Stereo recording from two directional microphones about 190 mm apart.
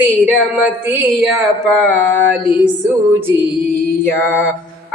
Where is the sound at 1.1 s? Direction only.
Centre (ahead or behind).